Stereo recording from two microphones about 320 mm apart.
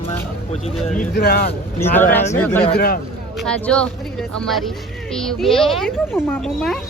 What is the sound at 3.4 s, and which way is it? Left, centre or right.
Speech, centre.